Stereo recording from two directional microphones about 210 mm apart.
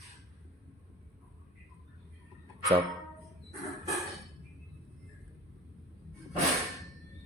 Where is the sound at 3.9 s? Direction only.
Centre (ahead or behind).